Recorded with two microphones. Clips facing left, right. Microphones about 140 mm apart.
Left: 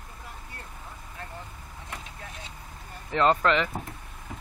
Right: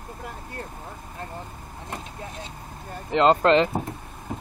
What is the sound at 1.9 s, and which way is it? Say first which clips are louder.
Speech: right 6 dB; 30° right (ahead or behind).